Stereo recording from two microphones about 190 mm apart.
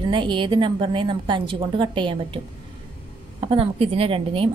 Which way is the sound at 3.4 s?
30° right (ahead or behind).